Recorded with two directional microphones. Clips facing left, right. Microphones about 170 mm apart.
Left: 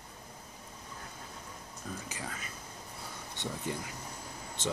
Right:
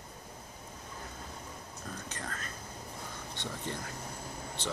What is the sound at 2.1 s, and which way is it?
Whispering, 5° left (ahead or behind).